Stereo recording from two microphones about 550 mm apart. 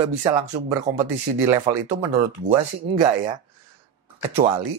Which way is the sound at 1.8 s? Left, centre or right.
Right.